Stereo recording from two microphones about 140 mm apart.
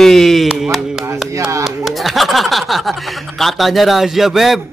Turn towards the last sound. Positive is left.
turn(degrees=0)  # may be behind; listen again after turning